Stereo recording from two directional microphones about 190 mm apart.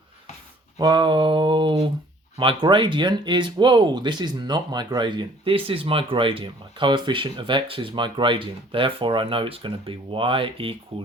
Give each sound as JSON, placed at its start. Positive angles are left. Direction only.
{"t": 0.8, "sound": "speech", "side_deg": -20}